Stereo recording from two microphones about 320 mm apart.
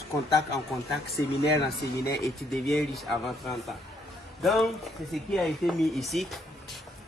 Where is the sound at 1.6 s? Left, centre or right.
Centre.